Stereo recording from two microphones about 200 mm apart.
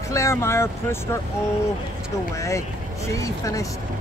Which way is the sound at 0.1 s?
15° left (ahead or behind).